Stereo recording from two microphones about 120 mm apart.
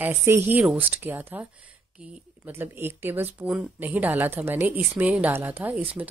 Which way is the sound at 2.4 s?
20° right (ahead or behind).